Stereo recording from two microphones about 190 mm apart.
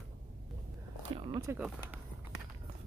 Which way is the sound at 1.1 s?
25° right (ahead or behind).